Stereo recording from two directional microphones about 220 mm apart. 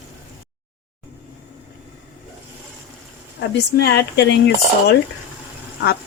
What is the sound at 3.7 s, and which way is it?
Speech, 50° left (ahead or behind).